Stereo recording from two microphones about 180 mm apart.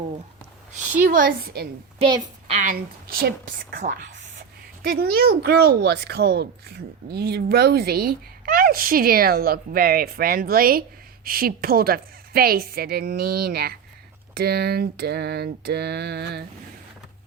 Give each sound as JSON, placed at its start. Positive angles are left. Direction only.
{"t": 0.9, "sound": "a woman's voice", "side_deg": -50}
{"t": 2.0, "sound": "a woman's voice", "side_deg": -30}
{"t": 2.6, "sound": "a woman's voice", "side_deg": -50}